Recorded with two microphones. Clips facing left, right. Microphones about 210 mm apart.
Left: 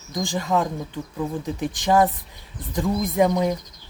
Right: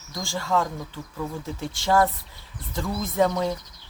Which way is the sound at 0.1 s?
15° left (ahead or behind).